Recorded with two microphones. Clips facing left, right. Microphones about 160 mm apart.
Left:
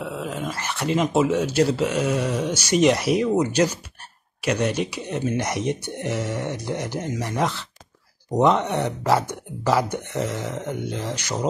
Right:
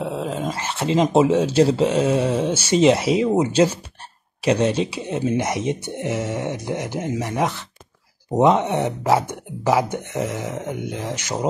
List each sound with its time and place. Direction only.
0.0 s dog: 30° right (ahead or behind)
1.0 s speech: 30° right (ahead or behind)